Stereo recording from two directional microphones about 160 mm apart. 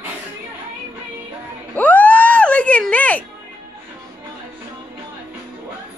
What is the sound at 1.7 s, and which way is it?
Music, 10° left (ahead or behind).